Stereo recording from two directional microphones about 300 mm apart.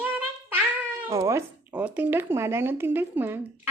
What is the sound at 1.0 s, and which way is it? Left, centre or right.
Speech, centre.